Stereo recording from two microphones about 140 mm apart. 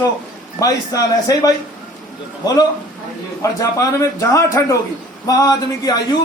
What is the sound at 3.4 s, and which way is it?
Speech, 20° left (ahead or behind).